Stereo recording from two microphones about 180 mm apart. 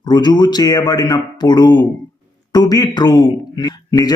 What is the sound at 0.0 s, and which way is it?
A man's voice, 25° left (ahead or behind).